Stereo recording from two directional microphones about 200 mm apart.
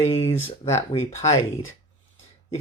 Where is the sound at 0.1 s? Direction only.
30° left (ahead or behind).